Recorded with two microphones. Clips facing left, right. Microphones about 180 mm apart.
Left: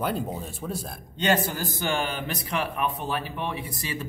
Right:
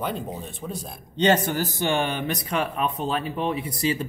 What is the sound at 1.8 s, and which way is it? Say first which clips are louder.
Speech: right 2 dB; 20° right (ahead or behind).